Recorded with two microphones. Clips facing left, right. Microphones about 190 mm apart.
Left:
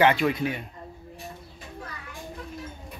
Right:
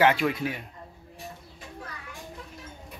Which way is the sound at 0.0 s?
5° right (ahead or behind).